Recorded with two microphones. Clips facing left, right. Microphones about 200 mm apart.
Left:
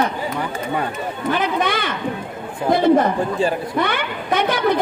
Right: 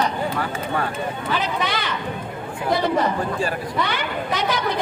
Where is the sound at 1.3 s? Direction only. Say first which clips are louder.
Left 6 dB; 50° left (ahead or behind).